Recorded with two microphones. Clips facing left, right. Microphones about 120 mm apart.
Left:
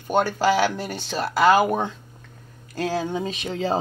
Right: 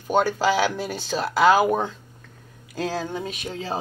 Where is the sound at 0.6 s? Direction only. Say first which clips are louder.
Left 1 dB; 5° right (ahead or behind); by 3.3 s 10° left (ahead or behind).